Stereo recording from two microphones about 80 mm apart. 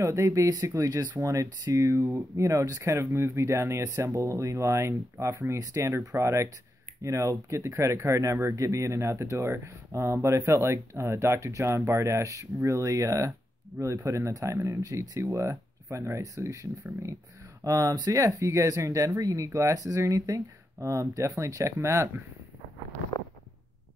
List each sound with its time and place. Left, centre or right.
0.0 s speech: right
17.6 s speech: right